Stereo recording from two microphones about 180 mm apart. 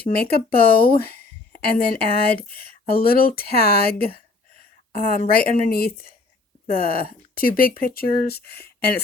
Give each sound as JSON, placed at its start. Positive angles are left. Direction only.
{"t": 0.0, "sound": "speech", "side_deg": 60}